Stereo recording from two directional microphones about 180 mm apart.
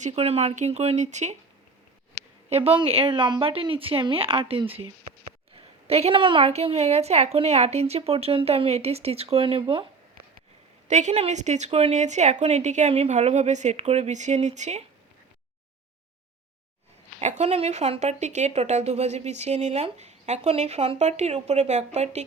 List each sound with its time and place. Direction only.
0.0 s speech: 35° right (ahead or behind)
2.5 s speech: 30° right (ahead or behind)
10.8 s speech: 40° right (ahead or behind)
17.2 s speech: 40° right (ahead or behind)